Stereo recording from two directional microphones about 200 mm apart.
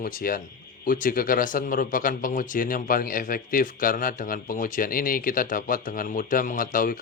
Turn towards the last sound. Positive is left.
turn(degrees=45)  # may be behind; listen again after turning